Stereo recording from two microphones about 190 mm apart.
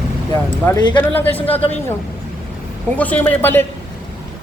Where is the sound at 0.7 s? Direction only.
20° left (ahead or behind).